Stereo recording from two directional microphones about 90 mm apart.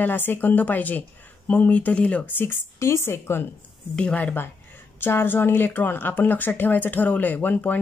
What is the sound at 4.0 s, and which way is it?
Speech, 10° left (ahead or behind).